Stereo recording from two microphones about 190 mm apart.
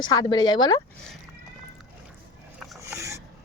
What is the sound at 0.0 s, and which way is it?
Speech, 20° left (ahead or behind).